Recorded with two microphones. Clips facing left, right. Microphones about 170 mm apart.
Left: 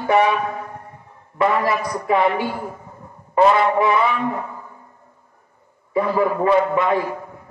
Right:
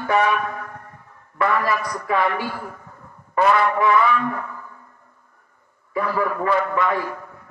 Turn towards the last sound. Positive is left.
turn(degrees=20)  # may be behind; listen again after turning